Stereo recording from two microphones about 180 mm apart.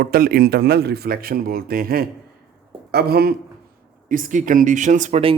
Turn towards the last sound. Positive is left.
turn(degrees=-35)  # may be behind; listen again after turning